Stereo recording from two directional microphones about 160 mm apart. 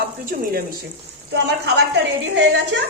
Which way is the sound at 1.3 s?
90° right.